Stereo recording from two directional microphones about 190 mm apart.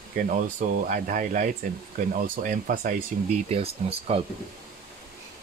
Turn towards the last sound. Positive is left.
turn(degrees=-30)  # may be behind; listen again after turning